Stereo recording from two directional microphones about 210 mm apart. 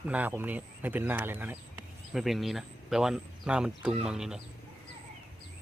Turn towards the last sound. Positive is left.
turn(degrees=-5)  # may be behind; listen again after turning